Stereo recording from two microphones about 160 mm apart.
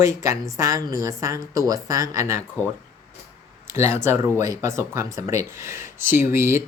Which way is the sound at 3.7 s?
15° right (ahead or behind).